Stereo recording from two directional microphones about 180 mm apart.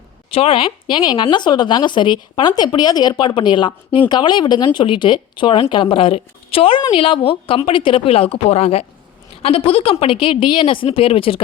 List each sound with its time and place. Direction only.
0.3 s a woman's voice: 30° left (ahead or behind)